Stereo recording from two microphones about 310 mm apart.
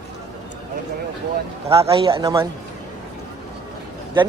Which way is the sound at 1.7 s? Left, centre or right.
Centre.